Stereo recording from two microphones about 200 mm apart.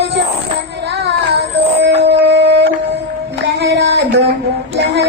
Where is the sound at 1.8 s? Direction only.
55° right (ahead or behind).